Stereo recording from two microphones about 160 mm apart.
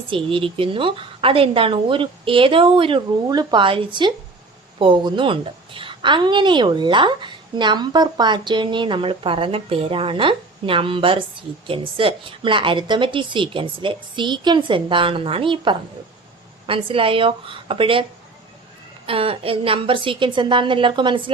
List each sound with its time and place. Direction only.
0.1 s a woman's voice: 35° right (ahead or behind)
19.0 s a woman's voice: 35° right (ahead or behind)